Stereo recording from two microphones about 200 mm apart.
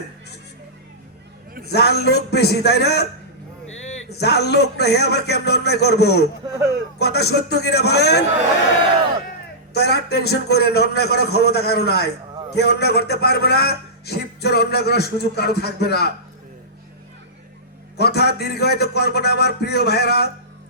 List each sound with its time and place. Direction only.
1.7 s a man's voice: 55° left (ahead or behind)
4.2 s a man's voice: 55° left (ahead or behind)
9.7 s a man's voice: 55° left (ahead or behind)
17.9 s a man's voice: 55° left (ahead or behind)